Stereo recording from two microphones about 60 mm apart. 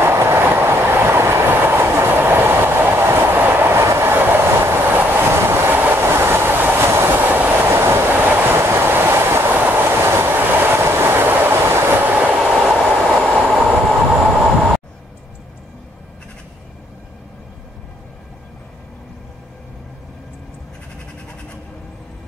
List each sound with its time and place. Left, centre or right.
0.0 s train: right
12.0 s train: right